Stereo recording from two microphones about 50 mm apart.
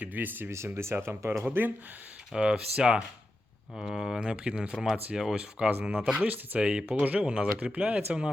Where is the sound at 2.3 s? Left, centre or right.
Centre.